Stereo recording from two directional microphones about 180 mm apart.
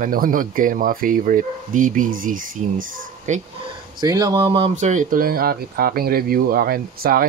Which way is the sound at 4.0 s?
20° right (ahead or behind).